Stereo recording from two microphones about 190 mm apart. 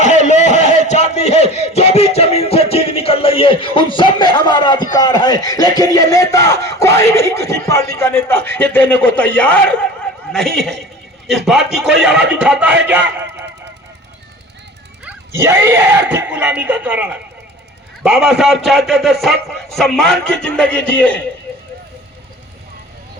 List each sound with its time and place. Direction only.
0.0 s a sound: 40° left (ahead or behind); by 9.9 s 5° left (ahead or behind)
10.3 s a man's voice: centre (ahead or behind)
15.0 s a man's voice: 10° right (ahead or behind); by 21.2 s 10° left (ahead or behind)